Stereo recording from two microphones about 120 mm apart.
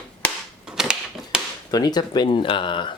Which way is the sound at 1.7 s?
35° left (ahead or behind).